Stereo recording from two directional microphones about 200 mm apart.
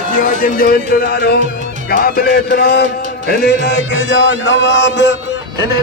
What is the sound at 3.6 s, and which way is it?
Music, 60° left (ahead or behind).